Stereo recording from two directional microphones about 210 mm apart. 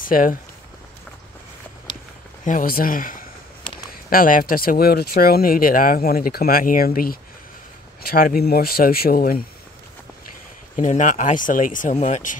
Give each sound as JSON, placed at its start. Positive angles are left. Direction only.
{"t": 0.0, "sound": "speech", "side_deg": 40}
{"t": 2.4, "sound": "speech", "side_deg": 40}
{"t": 10.8, "sound": "speech", "side_deg": 35}